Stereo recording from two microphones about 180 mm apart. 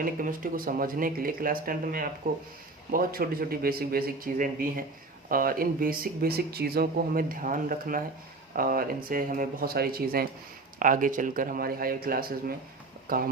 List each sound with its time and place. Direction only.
0.0 s speech: 50° right (ahead or behind)